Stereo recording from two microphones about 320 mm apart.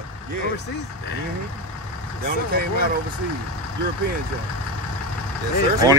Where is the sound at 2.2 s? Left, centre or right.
Right.